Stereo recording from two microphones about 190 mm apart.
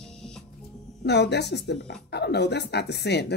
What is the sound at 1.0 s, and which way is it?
Speech, 60° left (ahead or behind).